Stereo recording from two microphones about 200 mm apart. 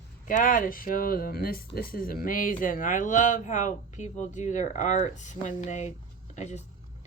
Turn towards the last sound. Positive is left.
turn(degrees=35)  # may be behind; listen again after turning